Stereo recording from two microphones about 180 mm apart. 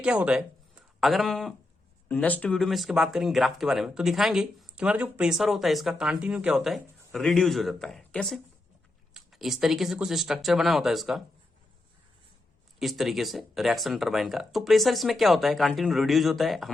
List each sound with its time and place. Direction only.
0.0 s speech: 5° right (ahead or behind)
12.8 s speech: centre (ahead or behind)